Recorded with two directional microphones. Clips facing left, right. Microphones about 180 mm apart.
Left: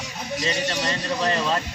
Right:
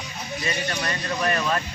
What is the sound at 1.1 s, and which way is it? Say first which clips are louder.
Speech: even; 20° left (ahead or behind).